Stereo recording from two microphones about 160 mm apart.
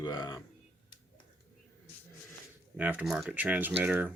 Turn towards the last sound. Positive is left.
turn(degrees=-10)  # may be behind; listen again after turning